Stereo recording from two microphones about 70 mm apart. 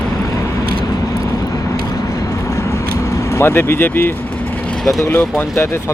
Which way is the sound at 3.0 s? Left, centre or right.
Left.